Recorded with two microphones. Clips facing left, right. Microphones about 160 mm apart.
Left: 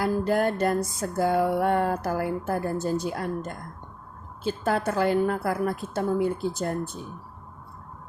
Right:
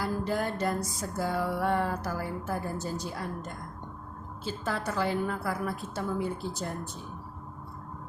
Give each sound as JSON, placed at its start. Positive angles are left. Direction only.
{"t": 0.0, "sound": "music", "side_deg": 55}